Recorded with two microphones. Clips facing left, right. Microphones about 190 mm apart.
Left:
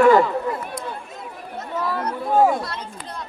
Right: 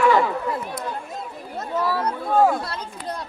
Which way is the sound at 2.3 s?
15° left (ahead or behind).